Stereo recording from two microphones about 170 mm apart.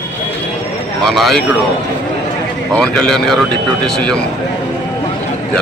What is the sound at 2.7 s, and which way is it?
A man's voice, 5° left (ahead or behind).